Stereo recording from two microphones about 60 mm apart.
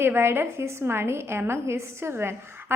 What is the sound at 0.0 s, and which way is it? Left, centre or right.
A woman's voice, right.